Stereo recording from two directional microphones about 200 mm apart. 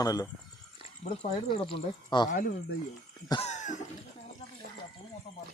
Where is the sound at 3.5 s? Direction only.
35° left (ahead or behind).